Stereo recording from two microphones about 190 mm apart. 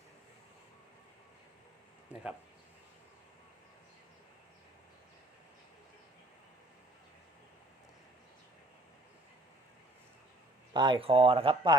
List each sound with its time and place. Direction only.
2.1 s speech: 5° right (ahead or behind)
10.8 s speech: 25° right (ahead or behind)